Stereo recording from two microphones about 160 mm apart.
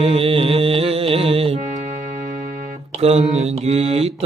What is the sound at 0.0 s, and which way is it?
Music, 35° right (ahead or behind).